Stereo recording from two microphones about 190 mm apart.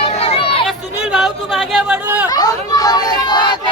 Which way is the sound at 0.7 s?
Centre (ahead or behind).